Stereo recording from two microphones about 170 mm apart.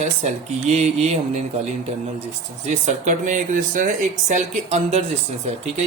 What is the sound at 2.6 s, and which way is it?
Speech, 45° right (ahead or behind).